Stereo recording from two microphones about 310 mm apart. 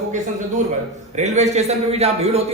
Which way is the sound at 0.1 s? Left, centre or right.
Right.